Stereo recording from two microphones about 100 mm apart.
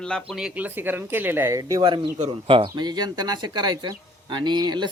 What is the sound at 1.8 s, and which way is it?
Speech, 55° right (ahead or behind).